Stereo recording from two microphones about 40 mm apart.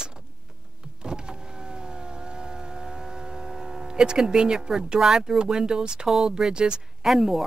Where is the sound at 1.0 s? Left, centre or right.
Right.